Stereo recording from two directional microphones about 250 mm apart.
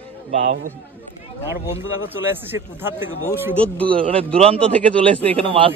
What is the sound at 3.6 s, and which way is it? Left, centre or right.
Speech, centre.